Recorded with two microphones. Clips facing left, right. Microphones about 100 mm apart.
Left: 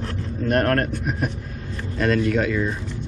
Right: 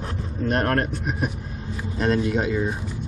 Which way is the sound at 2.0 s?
20° right (ahead or behind).